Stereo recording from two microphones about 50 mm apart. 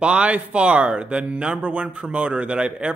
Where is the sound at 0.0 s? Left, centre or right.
Right.